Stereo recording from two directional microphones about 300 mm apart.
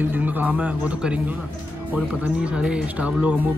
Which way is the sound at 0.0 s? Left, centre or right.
Centre.